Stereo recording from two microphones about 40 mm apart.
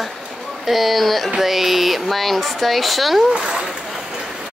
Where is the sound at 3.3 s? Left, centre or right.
Right.